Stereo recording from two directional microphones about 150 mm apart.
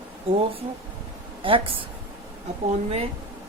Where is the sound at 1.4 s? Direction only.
35° right (ahead or behind).